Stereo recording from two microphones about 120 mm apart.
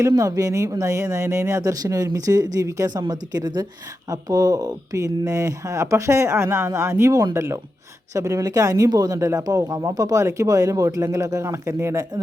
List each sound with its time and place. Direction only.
0.1 s speech: 30° right (ahead or behind)